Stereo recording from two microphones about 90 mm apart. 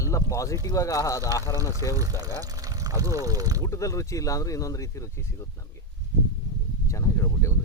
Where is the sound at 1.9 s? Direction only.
40° right (ahead or behind).